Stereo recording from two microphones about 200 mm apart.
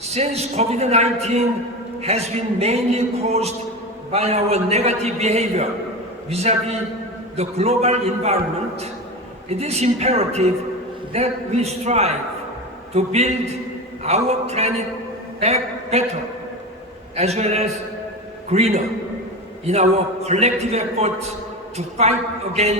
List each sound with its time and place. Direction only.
0.1 s a man's voice: 30° right (ahead or behind)
9.5 s a man's voice: 30° right (ahead or behind)
17.2 s a man's voice: 35° right (ahead or behind)